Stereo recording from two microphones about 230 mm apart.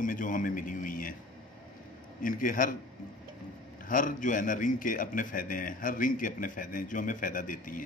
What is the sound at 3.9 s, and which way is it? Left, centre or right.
A man's voice, left.